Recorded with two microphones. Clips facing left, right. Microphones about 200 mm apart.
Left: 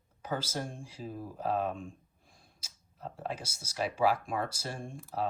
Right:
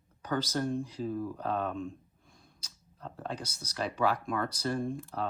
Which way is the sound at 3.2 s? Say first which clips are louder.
Right 1 dB; 5° left (ahead or behind).